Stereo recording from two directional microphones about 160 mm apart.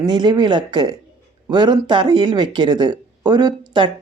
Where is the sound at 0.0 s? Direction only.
30° right (ahead or behind).